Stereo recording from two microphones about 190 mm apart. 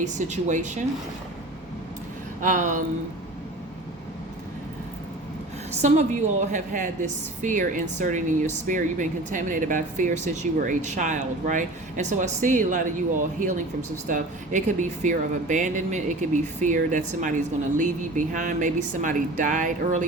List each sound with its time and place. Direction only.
0.0 s a woman's voice: 40° right (ahead or behind)
2.4 s speech: 45° right (ahead or behind)
5.8 s a woman's voice: 40° right (ahead or behind)